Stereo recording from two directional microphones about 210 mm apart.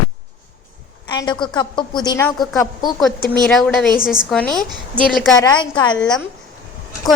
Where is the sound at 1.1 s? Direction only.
20° left (ahead or behind).